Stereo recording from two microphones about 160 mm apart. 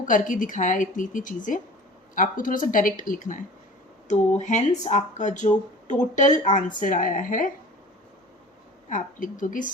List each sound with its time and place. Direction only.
0.0 s a woman's voice: 55° left (ahead or behind)
8.9 s a woman's voice: 55° left (ahead or behind)